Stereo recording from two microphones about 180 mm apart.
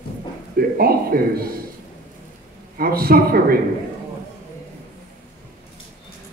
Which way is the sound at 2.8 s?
55° right (ahead or behind).